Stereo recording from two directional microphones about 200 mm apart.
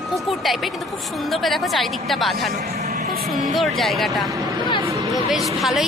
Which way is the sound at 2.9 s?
45° right (ahead or behind).